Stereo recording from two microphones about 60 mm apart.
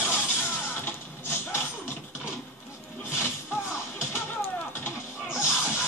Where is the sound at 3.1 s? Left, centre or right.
Left.